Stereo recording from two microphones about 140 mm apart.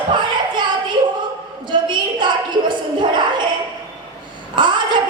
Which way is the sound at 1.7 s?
35° right (ahead or behind).